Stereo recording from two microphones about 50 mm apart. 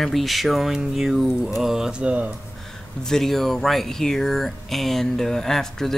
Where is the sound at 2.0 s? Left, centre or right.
Right.